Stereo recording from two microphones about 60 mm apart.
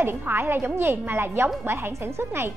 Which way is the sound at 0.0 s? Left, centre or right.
Right.